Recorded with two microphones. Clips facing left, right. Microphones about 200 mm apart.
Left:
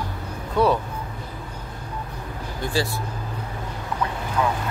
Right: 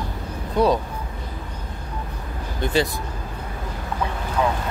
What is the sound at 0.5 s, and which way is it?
Speech, 15° right (ahead or behind).